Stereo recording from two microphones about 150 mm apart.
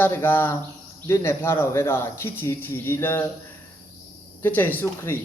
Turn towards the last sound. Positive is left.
turn(degrees=15)  # may be behind; listen again after turning